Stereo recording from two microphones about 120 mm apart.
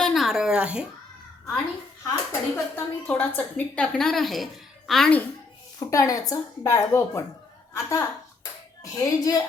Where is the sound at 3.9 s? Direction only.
5° left (ahead or behind).